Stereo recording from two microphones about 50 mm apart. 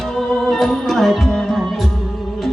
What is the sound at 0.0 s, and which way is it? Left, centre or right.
Music, centre.